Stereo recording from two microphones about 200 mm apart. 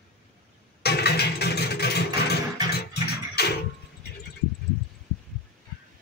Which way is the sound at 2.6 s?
20° right (ahead or behind).